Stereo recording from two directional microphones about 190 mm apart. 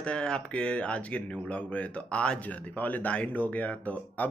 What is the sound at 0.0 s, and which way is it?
Speech, 5° left (ahead or behind).